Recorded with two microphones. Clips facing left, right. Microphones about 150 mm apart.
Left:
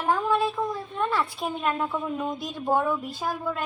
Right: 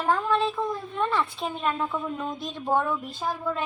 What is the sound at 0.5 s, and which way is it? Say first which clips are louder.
A woman's voice: even; centre (ahead or behind).